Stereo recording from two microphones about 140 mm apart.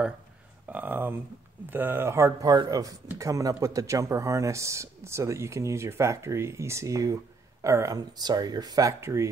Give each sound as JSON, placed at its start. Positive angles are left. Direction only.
{"t": 0.7, "sound": "speech", "side_deg": -15}